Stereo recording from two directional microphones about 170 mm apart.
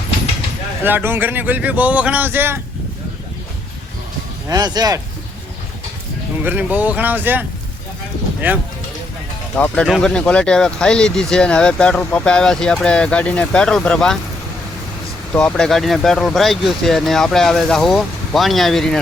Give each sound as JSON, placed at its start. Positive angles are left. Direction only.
{"t": 0.9, "sound": "speech", "side_deg": -10}
{"t": 4.4, "sound": "speech", "side_deg": -25}
{"t": 6.4, "sound": "speech", "side_deg": -10}
{"t": 9.6, "sound": "speech", "side_deg": 5}
{"t": 15.3, "sound": "speech", "side_deg": 5}